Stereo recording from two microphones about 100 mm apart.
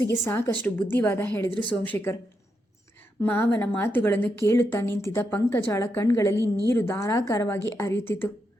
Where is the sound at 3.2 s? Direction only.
20° left (ahead or behind).